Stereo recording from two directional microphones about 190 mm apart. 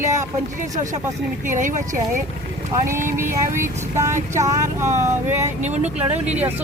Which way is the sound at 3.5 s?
15° right (ahead or behind).